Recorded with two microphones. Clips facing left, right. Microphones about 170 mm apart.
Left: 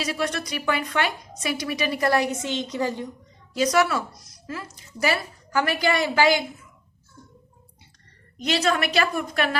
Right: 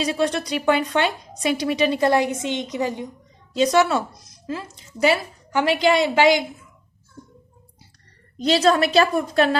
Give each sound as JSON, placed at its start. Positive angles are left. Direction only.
{"t": 0.1, "sound": "a woman's voice", "side_deg": -30}
{"t": 3.5, "sound": "a woman's voice", "side_deg": -25}
{"t": 8.4, "sound": "a woman's voice", "side_deg": -35}